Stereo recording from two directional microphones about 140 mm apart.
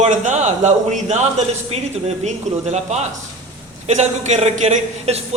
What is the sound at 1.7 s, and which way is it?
A man's voice, 45° right (ahead or behind).